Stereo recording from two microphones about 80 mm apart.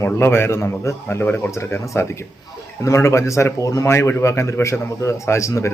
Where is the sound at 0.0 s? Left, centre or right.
Left.